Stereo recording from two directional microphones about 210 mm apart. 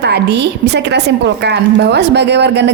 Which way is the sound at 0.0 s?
55° right (ahead or behind).